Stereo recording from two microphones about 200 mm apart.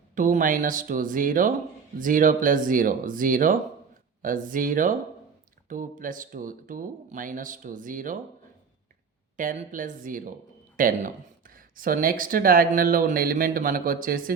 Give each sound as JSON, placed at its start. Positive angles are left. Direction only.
{"t": 0.2, "sound": "speech", "side_deg": -40}
{"t": 9.4, "sound": "speech", "side_deg": -40}